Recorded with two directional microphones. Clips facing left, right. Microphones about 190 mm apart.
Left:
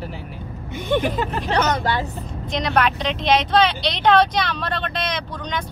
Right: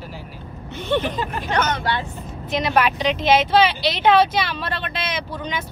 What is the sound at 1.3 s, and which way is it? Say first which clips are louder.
Speech: left 2 dB; 35° left (ahead or behind).